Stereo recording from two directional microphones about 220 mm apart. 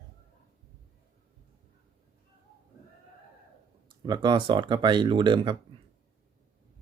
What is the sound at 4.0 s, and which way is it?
Speech, 20° right (ahead or behind).